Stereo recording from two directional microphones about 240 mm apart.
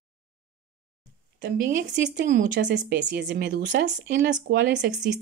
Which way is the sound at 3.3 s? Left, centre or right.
Right.